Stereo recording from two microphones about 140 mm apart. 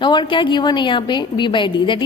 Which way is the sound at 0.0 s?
35° left (ahead or behind).